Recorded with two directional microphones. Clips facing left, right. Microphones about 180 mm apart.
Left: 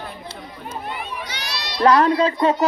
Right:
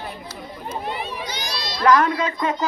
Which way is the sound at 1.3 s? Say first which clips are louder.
Right 2 dB; 75° left (ahead or behind).